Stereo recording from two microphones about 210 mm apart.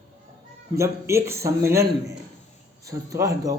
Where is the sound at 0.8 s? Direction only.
15° right (ahead or behind).